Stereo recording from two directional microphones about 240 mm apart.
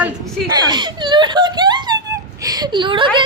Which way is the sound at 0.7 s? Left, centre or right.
Centre.